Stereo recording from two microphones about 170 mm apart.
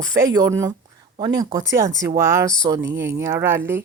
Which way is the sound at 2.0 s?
15° right (ahead or behind).